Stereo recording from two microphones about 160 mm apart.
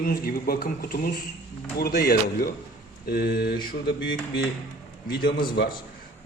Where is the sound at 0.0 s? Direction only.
65° left (ahead or behind).